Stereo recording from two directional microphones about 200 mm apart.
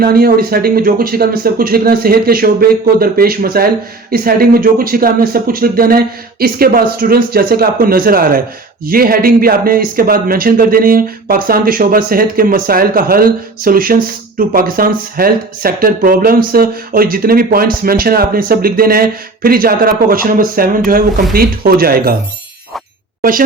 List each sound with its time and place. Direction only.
0.0 s speech: 50° right (ahead or behind)